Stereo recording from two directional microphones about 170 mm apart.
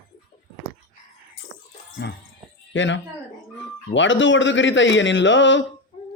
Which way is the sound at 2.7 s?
90° left.